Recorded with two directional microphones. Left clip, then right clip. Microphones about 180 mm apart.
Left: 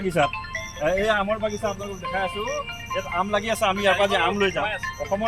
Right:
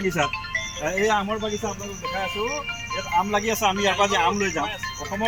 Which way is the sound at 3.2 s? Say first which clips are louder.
Right 2 dB; 15° left (ahead or behind).